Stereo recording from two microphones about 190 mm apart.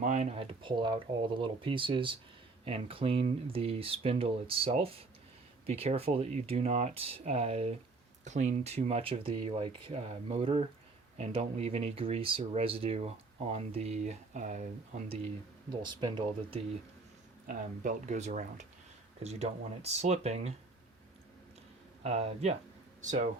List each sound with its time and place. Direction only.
0.0 s speech: 40° right (ahead or behind)
17.4 s speech: 45° right (ahead or behind)
22.0 s speech: 35° right (ahead or behind)